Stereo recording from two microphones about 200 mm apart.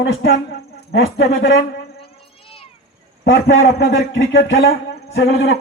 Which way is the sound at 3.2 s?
50° left (ahead or behind).